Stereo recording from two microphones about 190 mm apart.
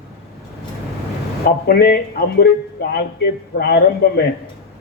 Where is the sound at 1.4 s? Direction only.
55° left (ahead or behind).